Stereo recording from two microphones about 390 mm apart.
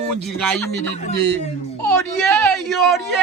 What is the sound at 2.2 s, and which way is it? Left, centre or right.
Speech, centre.